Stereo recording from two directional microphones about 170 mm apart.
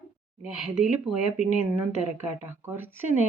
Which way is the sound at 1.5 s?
45° left (ahead or behind).